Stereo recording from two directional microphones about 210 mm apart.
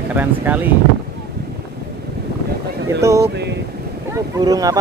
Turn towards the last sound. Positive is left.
turn(degrees=-15)  # may be behind; listen again after turning